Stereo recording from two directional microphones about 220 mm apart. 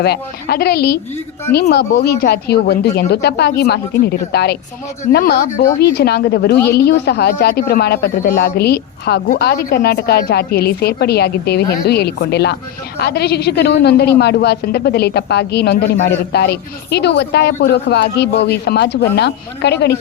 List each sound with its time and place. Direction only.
0.0 s a woman's voice: 45° left (ahead or behind)